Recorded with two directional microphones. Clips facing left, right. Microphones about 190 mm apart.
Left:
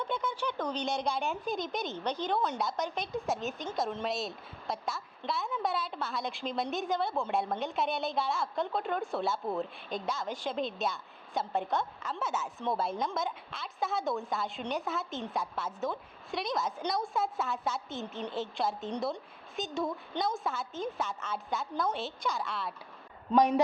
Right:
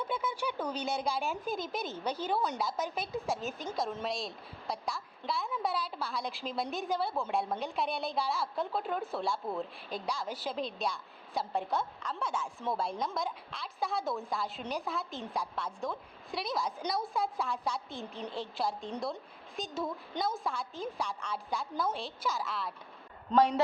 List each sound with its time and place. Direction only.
0.0 s a woman's voice: 5° right (ahead or behind)
23.3 s a man's voice: 15° left (ahead or behind)